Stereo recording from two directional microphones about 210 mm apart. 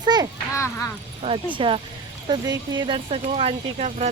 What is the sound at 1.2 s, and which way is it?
Speech, 25° right (ahead or behind).